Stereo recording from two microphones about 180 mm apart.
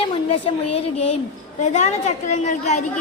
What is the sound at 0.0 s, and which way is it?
A woman's voice, 30° left (ahead or behind).